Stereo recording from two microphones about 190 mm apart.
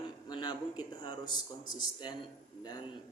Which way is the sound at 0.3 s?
20° left (ahead or behind).